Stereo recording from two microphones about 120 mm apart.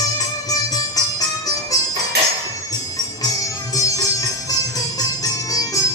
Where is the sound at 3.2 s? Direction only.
30° left (ahead or behind).